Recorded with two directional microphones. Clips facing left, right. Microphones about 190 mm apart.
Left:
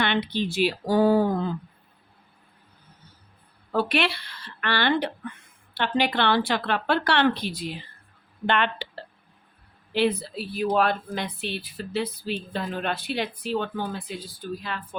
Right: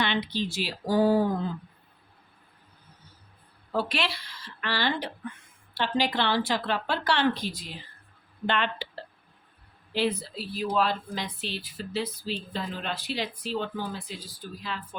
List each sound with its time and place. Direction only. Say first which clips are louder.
0.0 s speech: left 3 dB; 60° left (ahead or behind)
3.7 s speech: left 5 dB; 60° left (ahead or behind)
9.9 s speech: left 4 dB; 60° left (ahead or behind)